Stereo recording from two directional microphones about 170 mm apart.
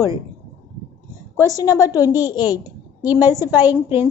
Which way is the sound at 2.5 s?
25° left (ahead or behind).